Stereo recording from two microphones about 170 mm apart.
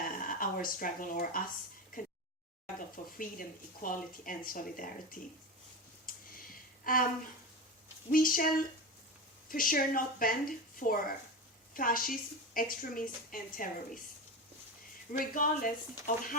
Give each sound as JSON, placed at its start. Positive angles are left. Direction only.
{"t": 0.0, "sound": "a sound", "side_deg": 55}
{"t": 2.7, "sound": "speech", "side_deg": 55}
{"t": 6.1, "sound": "a sound", "side_deg": 55}
{"t": 6.8, "sound": "speech", "side_deg": 55}
{"t": 8.1, "sound": "a woman's voice", "side_deg": 55}
{"t": 15.1, "sound": "speech", "side_deg": 55}